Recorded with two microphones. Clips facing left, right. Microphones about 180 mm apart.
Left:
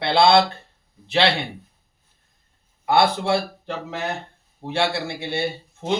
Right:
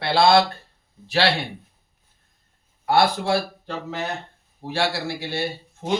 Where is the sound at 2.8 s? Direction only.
20° left (ahead or behind).